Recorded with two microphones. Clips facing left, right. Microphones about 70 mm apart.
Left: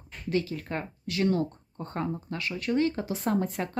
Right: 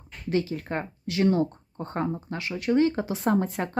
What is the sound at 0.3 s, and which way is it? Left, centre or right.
Speech, right.